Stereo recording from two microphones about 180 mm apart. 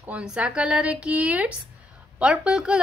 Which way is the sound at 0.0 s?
5° right (ahead or behind).